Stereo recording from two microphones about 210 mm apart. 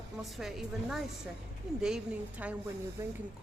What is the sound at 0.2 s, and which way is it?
A man's voice, centre (ahead or behind).